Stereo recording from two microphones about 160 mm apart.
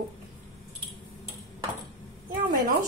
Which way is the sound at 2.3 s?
60° right (ahead or behind).